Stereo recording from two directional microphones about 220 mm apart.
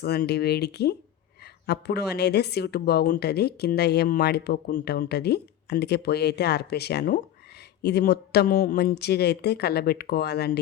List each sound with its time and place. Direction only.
0.0 s a woman's voice: 45° left (ahead or behind)